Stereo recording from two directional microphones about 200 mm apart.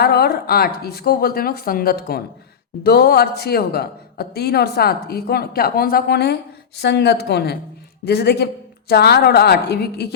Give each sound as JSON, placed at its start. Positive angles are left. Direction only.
{"t": 0.0, "sound": "a woman's voice", "side_deg": 50}